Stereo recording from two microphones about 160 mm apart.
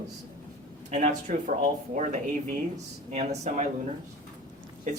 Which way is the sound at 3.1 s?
45° right (ahead or behind).